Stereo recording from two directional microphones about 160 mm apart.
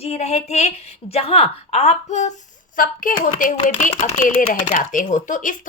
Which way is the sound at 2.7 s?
60° left (ahead or behind).